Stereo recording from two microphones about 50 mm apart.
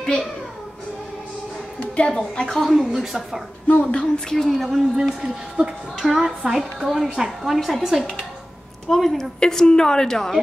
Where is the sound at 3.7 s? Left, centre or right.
Left.